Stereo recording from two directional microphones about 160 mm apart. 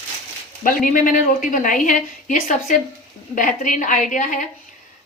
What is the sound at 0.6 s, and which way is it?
A woman's voice, 55° left (ahead or behind).